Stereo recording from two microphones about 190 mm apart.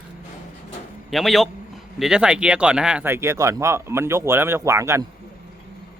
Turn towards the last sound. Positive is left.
turn(degrees=-15)  # may be behind; listen again after turning